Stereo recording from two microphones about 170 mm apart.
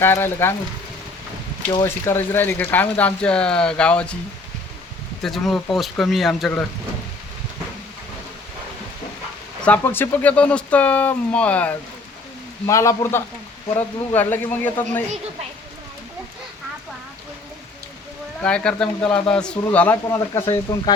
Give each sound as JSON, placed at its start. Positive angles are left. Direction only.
{"t": 0.0, "sound": "speech", "side_deg": 15}
{"t": 1.8, "sound": "speech", "side_deg": 15}
{"t": 5.2, "sound": "speech", "side_deg": 0}
{"t": 9.6, "sound": "speech", "side_deg": 10}
{"t": 18.4, "sound": "speech", "side_deg": 5}